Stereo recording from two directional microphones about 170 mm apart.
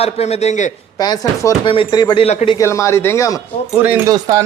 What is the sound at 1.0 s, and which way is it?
A man's voice, 25° left (ahead or behind).